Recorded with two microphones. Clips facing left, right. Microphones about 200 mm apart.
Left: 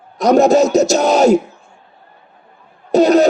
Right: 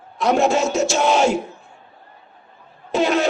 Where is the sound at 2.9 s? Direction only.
40° left (ahead or behind).